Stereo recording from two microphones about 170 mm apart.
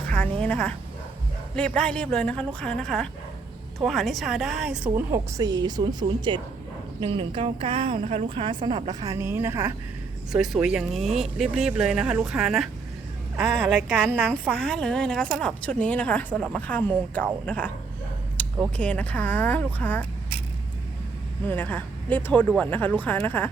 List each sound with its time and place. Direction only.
0.4 s a woman's voice: 5° left (ahead or behind); by 5.2 s 10° right (ahead or behind)
5.4 s speech: 25° right (ahead or behind)
10.3 s a woman's voice: centre (ahead or behind)
18.4 s a sound: 10° left (ahead or behind)
18.8 s speech: 10° left (ahead or behind)
21.4 s speech: 10° left (ahead or behind)